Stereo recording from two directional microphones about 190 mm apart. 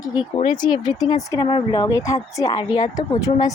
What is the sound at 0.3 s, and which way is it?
Speech, 25° left (ahead or behind).